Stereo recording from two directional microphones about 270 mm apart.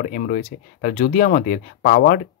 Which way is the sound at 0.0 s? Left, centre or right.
Left.